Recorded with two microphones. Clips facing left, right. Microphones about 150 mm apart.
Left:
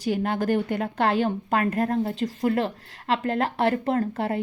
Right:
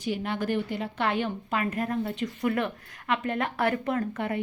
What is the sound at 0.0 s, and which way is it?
A woman's voice, 45° left (ahead or behind).